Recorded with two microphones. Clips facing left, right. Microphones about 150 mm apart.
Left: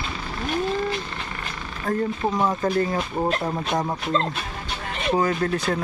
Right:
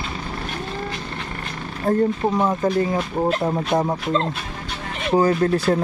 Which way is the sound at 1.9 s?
30° right (ahead or behind).